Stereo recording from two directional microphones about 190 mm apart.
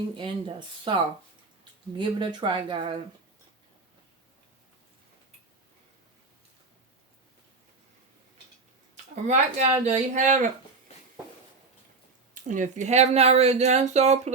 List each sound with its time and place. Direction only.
0.2 s speech: 25° right (ahead or behind)
9.2 s speech: 35° right (ahead or behind)
12.3 s speech: 40° right (ahead or behind)